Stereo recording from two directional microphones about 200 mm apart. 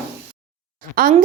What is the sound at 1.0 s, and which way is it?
Speech, 45° right (ahead or behind).